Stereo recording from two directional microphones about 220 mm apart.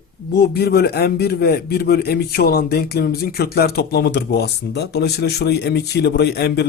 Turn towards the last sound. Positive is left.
turn(degrees=50)  # may be behind; listen again after turning